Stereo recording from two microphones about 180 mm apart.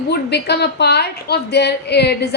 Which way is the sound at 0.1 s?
65° left (ahead or behind).